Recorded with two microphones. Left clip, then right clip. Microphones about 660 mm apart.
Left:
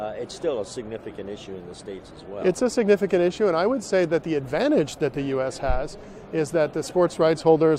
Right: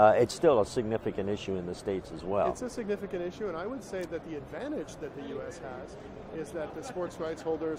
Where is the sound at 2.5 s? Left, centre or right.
Left.